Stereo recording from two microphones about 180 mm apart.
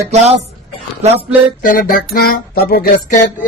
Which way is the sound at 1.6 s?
50° left (ahead or behind).